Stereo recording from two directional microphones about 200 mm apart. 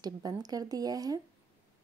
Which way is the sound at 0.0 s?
20° right (ahead or behind).